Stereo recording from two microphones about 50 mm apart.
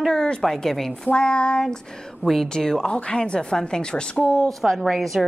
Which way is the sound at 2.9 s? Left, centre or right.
Left.